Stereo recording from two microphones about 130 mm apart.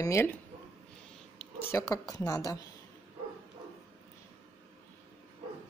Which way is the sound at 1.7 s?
25° left (ahead or behind).